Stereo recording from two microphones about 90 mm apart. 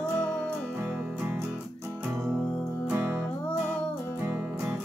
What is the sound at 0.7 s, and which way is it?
Music, 20° right (ahead or behind).